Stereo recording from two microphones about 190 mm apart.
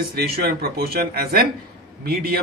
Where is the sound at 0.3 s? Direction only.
55° right (ahead or behind).